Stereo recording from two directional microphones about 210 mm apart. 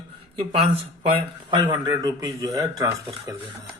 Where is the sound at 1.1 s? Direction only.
20° right (ahead or behind).